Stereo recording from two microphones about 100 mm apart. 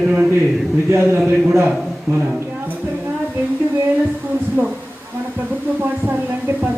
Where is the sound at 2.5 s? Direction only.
15° right (ahead or behind).